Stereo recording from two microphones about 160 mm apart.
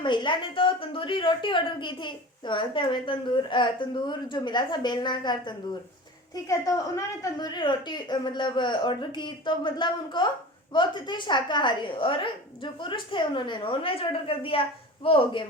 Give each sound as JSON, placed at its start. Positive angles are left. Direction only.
{"t": 0.0, "sound": "a woman's voice", "side_deg": 30}